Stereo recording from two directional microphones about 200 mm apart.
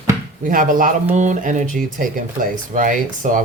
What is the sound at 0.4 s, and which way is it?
Speech, 40° right (ahead or behind).